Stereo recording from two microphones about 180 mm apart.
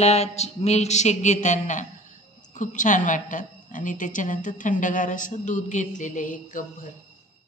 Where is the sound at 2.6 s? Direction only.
45° left (ahead or behind).